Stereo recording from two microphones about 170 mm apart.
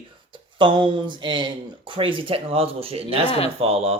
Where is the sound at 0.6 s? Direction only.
30° right (ahead or behind).